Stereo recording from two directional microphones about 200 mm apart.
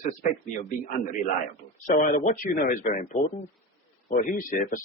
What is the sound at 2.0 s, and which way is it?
A man's voice, 40° left (ahead or behind).